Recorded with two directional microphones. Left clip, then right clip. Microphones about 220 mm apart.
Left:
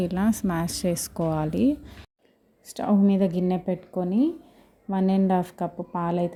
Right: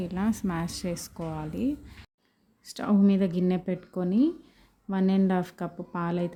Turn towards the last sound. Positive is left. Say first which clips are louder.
# left 5 dB
turn(degrees=0)  # may be behind; listen again after turning